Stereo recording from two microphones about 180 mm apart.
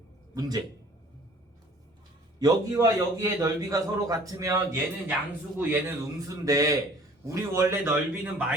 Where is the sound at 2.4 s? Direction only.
20° right (ahead or behind).